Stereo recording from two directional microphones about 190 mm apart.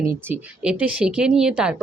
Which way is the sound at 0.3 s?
5° right (ahead or behind).